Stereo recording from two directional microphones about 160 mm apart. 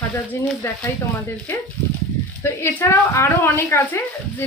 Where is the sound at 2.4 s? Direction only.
15° left (ahead or behind).